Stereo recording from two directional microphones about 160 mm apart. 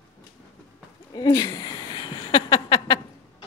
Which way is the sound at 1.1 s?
25° left (ahead or behind).